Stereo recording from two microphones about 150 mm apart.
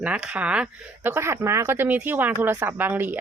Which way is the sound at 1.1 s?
20° right (ahead or behind).